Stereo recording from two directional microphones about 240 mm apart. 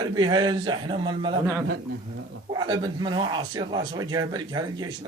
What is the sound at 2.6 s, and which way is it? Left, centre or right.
A man's voice, centre.